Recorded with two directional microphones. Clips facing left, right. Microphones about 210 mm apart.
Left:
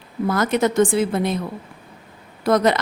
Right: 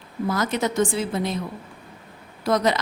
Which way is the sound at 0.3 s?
55° left (ahead or behind).